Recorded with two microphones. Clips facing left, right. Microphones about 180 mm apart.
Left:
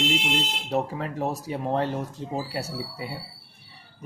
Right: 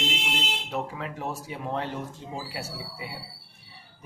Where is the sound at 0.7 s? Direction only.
40° left (ahead or behind).